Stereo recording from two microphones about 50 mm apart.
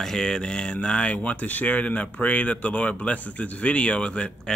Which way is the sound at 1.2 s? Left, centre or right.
Left.